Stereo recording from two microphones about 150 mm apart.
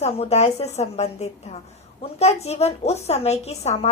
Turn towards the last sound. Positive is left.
turn(degrees=45)  # may be behind; listen again after turning